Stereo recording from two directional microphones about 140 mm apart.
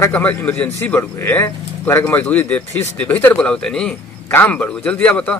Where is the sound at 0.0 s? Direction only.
10° left (ahead or behind).